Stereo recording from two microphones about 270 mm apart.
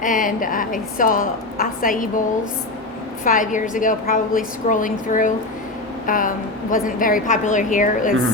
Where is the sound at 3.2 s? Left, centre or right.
Left.